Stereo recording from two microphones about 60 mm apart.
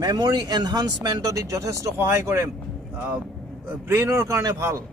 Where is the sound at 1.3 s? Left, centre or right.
Right.